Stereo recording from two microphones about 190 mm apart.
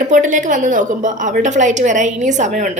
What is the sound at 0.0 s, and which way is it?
A woman's voice, 40° right (ahead or behind).